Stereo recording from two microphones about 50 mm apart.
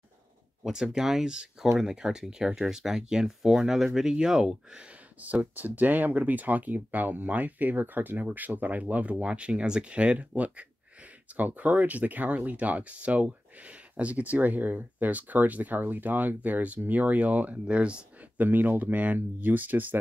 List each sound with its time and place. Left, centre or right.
0.7 s speech: centre
5.2 s speech: right
18.4 s speech: right